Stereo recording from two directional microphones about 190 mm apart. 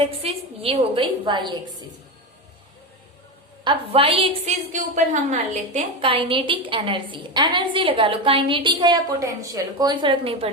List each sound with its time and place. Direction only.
0.0 s a woman's voice: 30° right (ahead or behind)
3.6 s a woman's voice: 25° right (ahead or behind)